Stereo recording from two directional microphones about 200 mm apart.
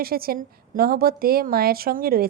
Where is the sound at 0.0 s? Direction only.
50° right (ahead or behind).